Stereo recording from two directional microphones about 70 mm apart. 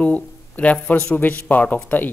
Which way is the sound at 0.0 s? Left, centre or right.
Centre.